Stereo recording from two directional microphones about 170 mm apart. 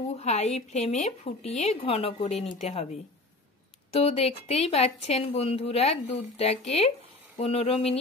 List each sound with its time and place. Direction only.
0.1 s speech: 40° left (ahead or behind)
3.9 s speech: 35° left (ahead or behind)